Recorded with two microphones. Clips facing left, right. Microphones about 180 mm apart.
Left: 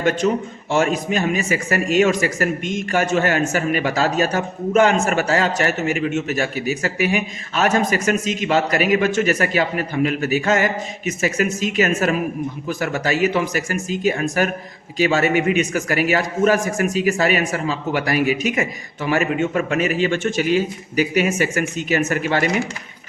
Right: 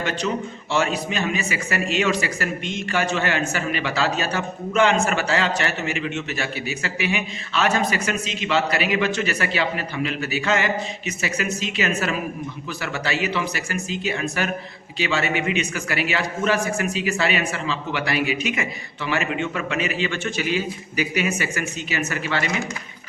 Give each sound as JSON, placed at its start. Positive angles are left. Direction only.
{"t": 0.0, "sound": "a man's voice", "side_deg": 45}